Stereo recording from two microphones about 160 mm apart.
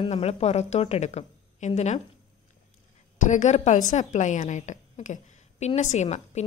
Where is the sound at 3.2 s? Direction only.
50° left (ahead or behind).